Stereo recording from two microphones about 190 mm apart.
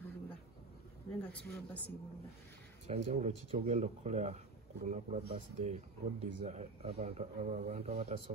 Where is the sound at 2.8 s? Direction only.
35° right (ahead or behind).